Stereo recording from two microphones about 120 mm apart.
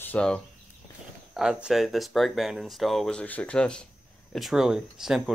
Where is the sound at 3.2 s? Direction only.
10° left (ahead or behind).